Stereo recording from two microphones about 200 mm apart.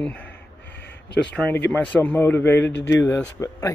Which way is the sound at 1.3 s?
10° left (ahead or behind).